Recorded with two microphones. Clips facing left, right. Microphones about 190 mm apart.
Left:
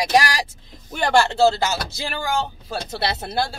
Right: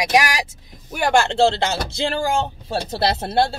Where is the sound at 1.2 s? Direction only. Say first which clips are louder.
Even; 30° right (ahead or behind).